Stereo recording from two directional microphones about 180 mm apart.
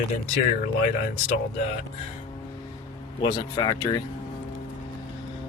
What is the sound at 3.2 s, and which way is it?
Speech, 20° left (ahead or behind).